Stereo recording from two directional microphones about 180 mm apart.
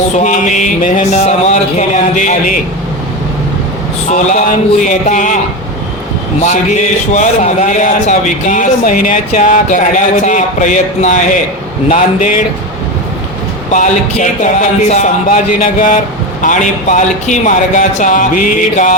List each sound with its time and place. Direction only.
0.2 s a man's voice: 45° left (ahead or behind)
4.1 s a man's voice: 40° left (ahead or behind)
6.4 s a man's voice: 40° left (ahead or behind)
13.7 s a man's voice: 45° left (ahead or behind)